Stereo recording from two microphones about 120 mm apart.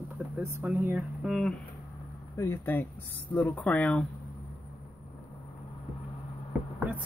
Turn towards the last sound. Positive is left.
turn(degrees=-15)  # may be behind; listen again after turning